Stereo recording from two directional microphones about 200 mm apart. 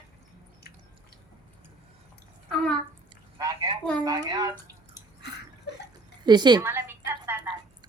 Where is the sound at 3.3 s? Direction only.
20° right (ahead or behind).